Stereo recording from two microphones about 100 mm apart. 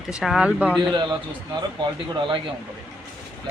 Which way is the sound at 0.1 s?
5° right (ahead or behind).